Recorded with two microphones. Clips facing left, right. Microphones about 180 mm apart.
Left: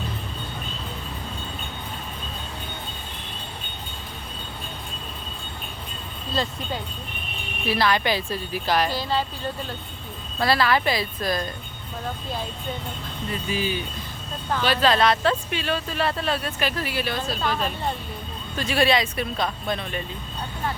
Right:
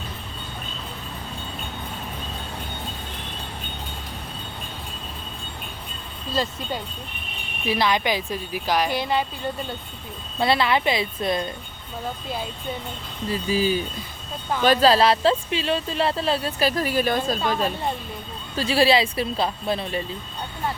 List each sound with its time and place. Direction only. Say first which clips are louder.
7.7 s a woman's voice: even; 15° right (ahead or behind)
10.4 s speech: right 1 dB; 20° right (ahead or behind)
13.3 s speech: right 5 dB; 35° right (ahead or behind)
18.5 s speech: right 3 dB; 30° right (ahead or behind)